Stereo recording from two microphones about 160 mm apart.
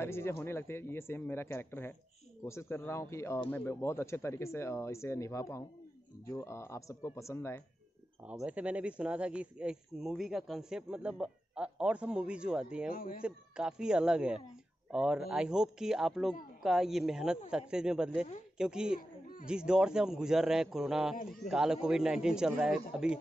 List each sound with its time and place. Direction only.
0.0 s speech: 15° left (ahead or behind)
8.3 s speech: 10° right (ahead or behind)
12.9 s speech: 65° left (ahead or behind)
13.2 s speech: 5° right (ahead or behind)
18.9 s a sound: 60° left (ahead or behind)
19.4 s speech: 5° right (ahead or behind)